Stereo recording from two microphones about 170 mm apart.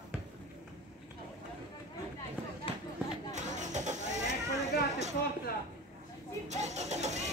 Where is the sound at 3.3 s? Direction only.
45° right (ahead or behind).